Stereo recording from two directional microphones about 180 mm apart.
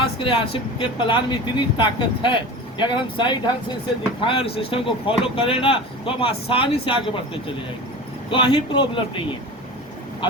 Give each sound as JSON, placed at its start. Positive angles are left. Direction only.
{"t": 0.0, "sound": "speech", "side_deg": 30}
{"t": 8.3, "sound": "speech", "side_deg": 30}